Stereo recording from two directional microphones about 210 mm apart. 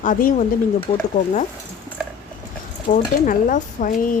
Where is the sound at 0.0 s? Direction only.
40° left (ahead or behind).